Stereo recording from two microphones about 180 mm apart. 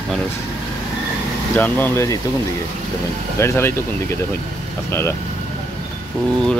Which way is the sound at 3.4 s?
15° left (ahead or behind).